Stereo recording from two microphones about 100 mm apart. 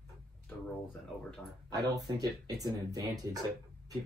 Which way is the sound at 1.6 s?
35° right (ahead or behind).